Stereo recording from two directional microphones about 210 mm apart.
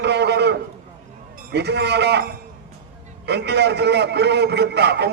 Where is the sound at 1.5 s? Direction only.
55° right (ahead or behind).